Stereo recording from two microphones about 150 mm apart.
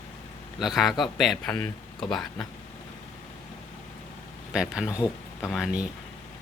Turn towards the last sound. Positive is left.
turn(degrees=-5)  # may be behind; listen again after turning